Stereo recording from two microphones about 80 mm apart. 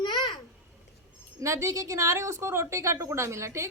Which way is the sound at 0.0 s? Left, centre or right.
Left.